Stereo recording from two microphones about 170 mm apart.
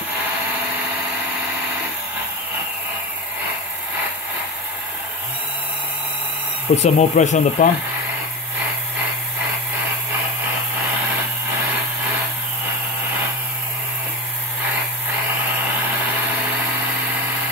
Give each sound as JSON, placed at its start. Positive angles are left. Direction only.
{"t": 6.7, "sound": "speech", "side_deg": 40}